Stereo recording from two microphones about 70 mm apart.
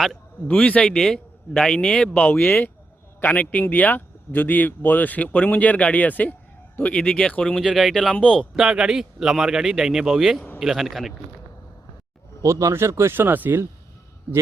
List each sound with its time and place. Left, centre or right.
0.4 s a man's voice: centre
8.1 s a man's voice: centre
8.5 s a man's voice: centre
12.4 s speech: right